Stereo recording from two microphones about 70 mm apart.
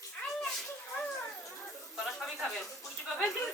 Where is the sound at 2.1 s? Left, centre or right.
Centre.